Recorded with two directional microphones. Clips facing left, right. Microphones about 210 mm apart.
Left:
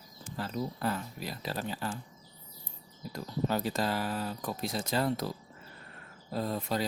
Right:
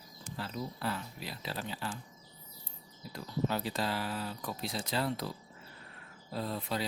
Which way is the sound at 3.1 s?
45° left (ahead or behind).